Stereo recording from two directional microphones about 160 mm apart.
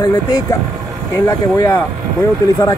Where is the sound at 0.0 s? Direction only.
20° left (ahead or behind).